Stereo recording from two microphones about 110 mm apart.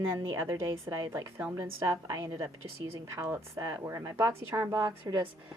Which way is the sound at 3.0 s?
25° right (ahead or behind).